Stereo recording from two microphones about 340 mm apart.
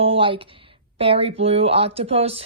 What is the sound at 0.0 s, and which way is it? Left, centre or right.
Speech, centre.